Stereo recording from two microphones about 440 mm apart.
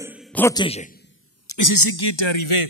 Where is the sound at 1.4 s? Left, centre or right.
Left.